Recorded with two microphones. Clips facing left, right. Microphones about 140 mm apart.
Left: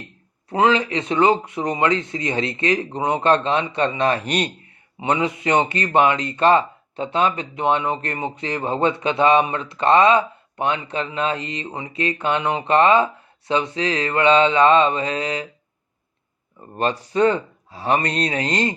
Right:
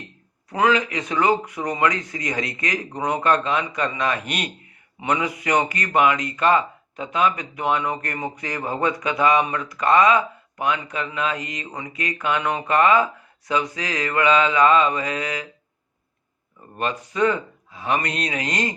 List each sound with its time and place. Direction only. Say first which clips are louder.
0.5 s speech: left 2 dB; 25° left (ahead or behind)
16.7 s speech: left 5 dB; 30° left (ahead or behind)